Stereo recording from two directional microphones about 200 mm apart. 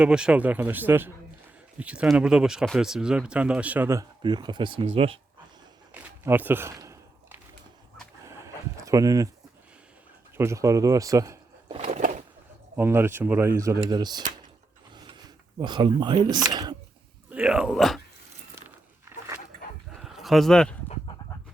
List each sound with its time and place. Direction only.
0.0 s speech: 5° right (ahead or behind); by 5.2 s 30° right (ahead or behind)
5.9 s a sound: 10° right (ahead or behind)
8.2 s chicken: 15° right (ahead or behind)
10.3 s speech: 15° right (ahead or behind)
11.8 s bird: 35° right (ahead or behind)
12.7 s speech: 10° right (ahead or behind)
14.9 s a sound: 20° right (ahead or behind)
17.2 s speech: 5° right (ahead or behind)
19.1 s dog: 10° right (ahead or behind)
20.0 s a sound: centre (ahead or behind)